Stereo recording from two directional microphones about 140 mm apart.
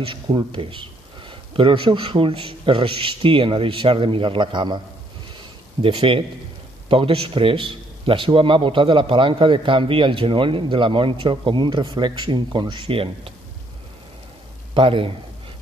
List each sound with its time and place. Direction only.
0.0 s a man's voice: 35° right (ahead or behind)
5.8 s a man's voice: 40° right (ahead or behind)
14.7 s a man's voice: 40° right (ahead or behind)